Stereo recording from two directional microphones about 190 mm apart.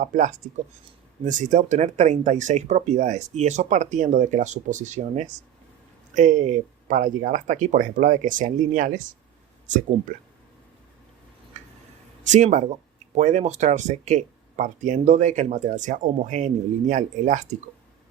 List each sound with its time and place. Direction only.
0.0 s speech: 45° right (ahead or behind)
11.6 s a sound: 40° right (ahead or behind)
12.2 s speech: 40° right (ahead or behind)